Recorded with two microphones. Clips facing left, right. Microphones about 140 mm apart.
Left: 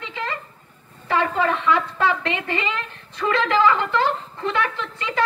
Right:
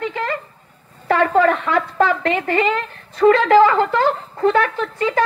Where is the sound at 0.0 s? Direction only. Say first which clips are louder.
Right 7 dB; 50° right (ahead or behind).